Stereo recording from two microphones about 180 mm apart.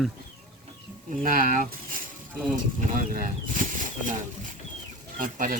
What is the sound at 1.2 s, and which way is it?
Speech, 50° right (ahead or behind).